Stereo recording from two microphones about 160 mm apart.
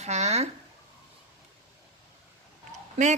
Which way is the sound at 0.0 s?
45° right (ahead or behind).